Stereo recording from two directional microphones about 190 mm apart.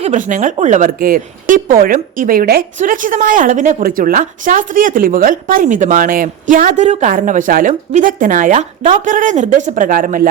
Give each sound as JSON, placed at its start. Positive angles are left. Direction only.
{"t": 0.0, "sound": "speech", "side_deg": -40}